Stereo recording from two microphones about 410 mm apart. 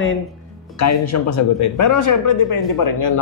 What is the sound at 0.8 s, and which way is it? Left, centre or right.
Speech, left.